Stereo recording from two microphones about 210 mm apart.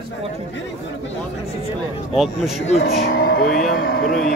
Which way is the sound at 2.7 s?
50° left (ahead or behind).